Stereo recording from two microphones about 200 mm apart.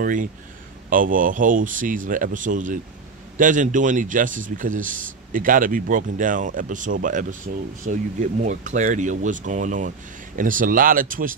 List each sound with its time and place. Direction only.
0.0 s speech: 40° right (ahead or behind)